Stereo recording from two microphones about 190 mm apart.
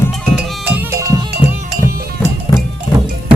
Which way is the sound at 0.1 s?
5° right (ahead or behind).